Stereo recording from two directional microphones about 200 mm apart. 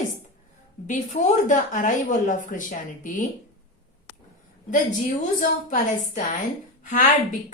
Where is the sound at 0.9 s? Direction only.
40° left (ahead or behind).